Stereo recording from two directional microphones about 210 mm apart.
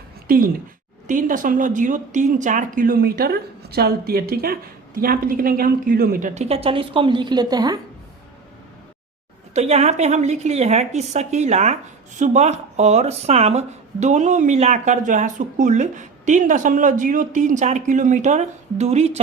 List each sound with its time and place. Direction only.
0.3 s a woman's voice: 45° right (ahead or behind); by 7.8 s 20° right (ahead or behind)
9.6 s speech: 30° right (ahead or behind)